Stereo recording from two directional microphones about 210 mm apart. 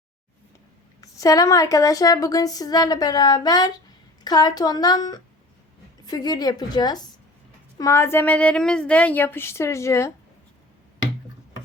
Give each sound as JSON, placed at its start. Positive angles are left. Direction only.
{"t": 1.0, "sound": "a woman's voice", "side_deg": 15}